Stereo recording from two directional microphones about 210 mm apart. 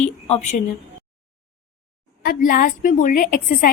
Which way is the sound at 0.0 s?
30° left (ahead or behind).